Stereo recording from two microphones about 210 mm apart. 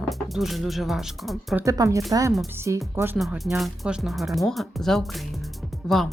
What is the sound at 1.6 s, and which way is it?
Speech, 15° right (ahead or behind).